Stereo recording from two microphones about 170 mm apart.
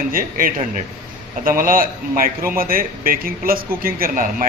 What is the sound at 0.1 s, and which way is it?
A man's voice, 55° right (ahead or behind).